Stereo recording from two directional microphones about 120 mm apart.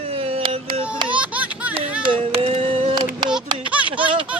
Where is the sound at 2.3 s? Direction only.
50° right (ahead or behind).